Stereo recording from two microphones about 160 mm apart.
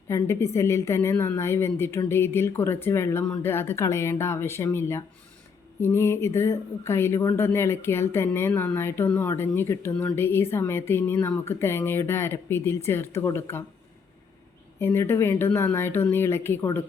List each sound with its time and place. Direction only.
0.1 s speech: 15° left (ahead or behind)
14.8 s speech: 15° left (ahead or behind)